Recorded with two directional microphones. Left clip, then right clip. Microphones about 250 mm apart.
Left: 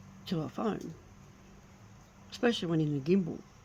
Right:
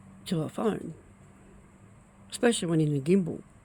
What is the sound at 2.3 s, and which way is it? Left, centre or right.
Speech, right.